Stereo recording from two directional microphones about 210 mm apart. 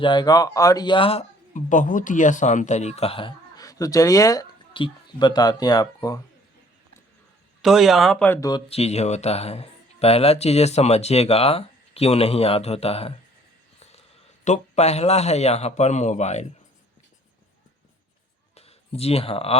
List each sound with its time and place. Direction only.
0.0 s speech: 20° left (ahead or behind)
7.6 s speech: centre (ahead or behind)
8.4 s speech: 20° left (ahead or behind)
14.4 s a man's voice: 30° left (ahead or behind)
18.5 s a sound: 30° left (ahead or behind)